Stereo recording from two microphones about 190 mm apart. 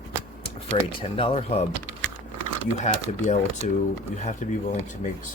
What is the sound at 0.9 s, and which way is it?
Speech, 30° left (ahead or behind).